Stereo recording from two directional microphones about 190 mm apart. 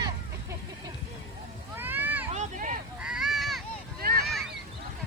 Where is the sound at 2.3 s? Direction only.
40° right (ahead or behind).